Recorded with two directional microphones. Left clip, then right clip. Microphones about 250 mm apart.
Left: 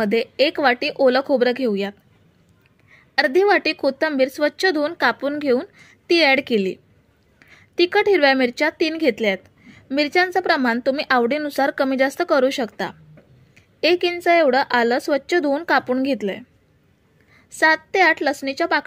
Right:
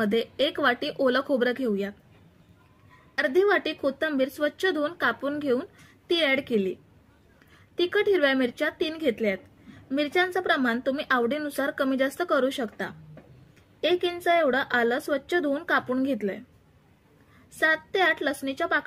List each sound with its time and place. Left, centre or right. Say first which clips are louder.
0.0 s a woman's voice: left 7 dB; left
3.2 s a woman's voice: left 6 dB; left
13.9 s a woman's voice: left 6 dB; left
17.6 s a woman's voice: left 7 dB; left
18.2 s a woman's voice: left 7 dB; left